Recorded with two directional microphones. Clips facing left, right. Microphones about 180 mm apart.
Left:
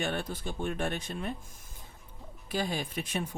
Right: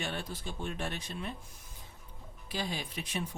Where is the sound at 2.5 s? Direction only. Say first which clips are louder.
Left 5 dB; 50° left (ahead or behind).